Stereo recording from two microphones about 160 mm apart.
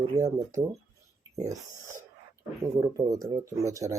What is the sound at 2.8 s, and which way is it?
Speech, 20° right (ahead or behind).